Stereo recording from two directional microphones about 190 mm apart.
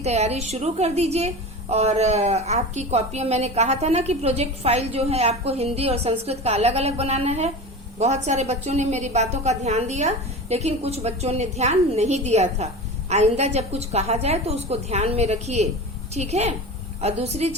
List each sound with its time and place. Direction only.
0.0 s a woman's voice: 35° right (ahead or behind)